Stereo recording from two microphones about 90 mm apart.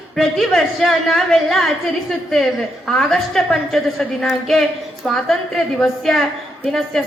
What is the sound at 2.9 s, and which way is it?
A woman's voice, 5° left (ahead or behind).